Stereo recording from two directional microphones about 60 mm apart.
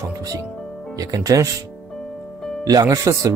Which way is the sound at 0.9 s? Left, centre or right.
Right.